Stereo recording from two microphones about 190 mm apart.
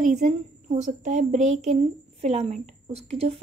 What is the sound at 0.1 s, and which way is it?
Speech, 35° right (ahead or behind).